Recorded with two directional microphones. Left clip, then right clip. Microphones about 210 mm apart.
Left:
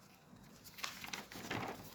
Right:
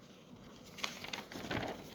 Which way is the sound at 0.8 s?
Centre (ahead or behind).